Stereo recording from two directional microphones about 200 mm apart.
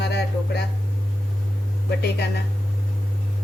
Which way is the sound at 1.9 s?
55° left (ahead or behind).